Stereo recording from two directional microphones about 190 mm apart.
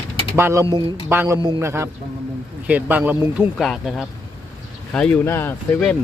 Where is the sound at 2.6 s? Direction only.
10° right (ahead or behind); by 5.9 s 5° left (ahead or behind).